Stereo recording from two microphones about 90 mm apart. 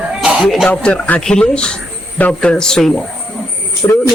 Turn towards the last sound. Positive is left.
turn(degrees=30)  # may be behind; listen again after turning